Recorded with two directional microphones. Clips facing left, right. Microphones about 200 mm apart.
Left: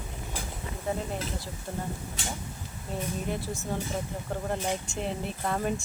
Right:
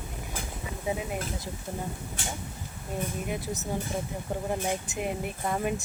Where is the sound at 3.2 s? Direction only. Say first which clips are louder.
Even; 20° right (ahead or behind).